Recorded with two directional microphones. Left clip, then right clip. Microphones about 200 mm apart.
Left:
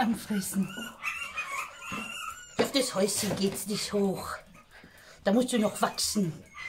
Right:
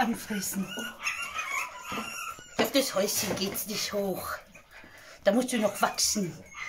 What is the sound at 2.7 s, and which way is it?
Speech, 5° left (ahead or behind).